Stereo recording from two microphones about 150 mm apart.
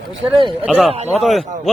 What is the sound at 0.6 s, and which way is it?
Speech, 10° right (ahead or behind).